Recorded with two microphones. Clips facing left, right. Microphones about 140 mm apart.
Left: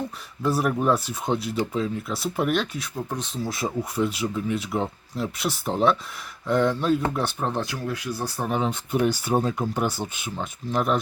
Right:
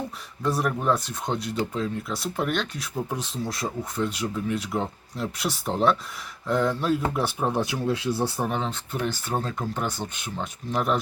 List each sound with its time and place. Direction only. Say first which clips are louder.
0.4 s speech: left 2 dB; 5° left (ahead or behind)
7.6 s speech: right 4 dB; 20° right (ahead or behind)
8.4 s speech: left 2 dB; 5° left (ahead or behind)